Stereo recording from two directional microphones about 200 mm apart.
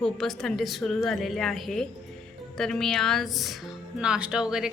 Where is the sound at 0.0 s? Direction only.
Centre (ahead or behind).